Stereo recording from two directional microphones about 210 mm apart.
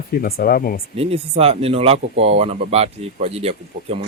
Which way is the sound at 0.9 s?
30° right (ahead or behind).